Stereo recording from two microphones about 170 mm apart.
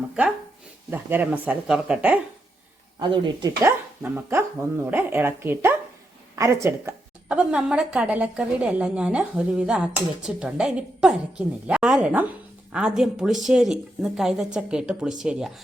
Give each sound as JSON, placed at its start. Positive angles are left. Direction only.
{"t": 0.9, "sound": "speech", "side_deg": -10}
{"t": 3.0, "sound": "speech", "side_deg": -25}
{"t": 3.6, "sound": "a woman's voice", "side_deg": -10}